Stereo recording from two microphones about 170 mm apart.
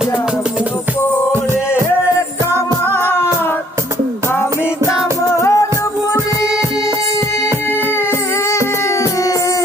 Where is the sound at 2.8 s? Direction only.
10° left (ahead or behind).